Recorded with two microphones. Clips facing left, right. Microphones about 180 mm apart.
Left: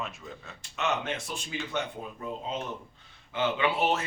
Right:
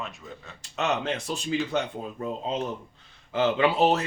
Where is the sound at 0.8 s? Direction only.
40° right (ahead or behind).